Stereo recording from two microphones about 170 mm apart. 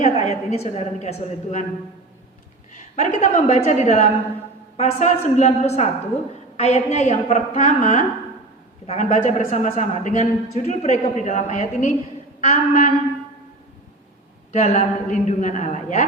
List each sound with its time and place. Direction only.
0.0 s a woman's voice: 40° left (ahead or behind)
2.9 s a woman's voice: 40° left (ahead or behind)
14.5 s a man's voice: 40° left (ahead or behind)